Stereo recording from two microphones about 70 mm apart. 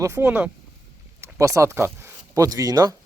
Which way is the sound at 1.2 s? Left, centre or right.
Right.